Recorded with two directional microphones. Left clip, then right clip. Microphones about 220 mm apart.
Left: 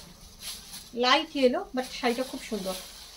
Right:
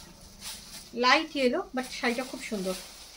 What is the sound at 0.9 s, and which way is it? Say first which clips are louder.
A woman's voice: even; 20° right (ahead or behind).